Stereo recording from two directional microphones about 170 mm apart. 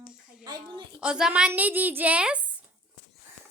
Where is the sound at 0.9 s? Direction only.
5° right (ahead or behind).